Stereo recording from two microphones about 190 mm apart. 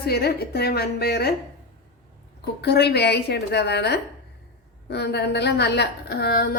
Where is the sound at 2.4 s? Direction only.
60° left (ahead or behind).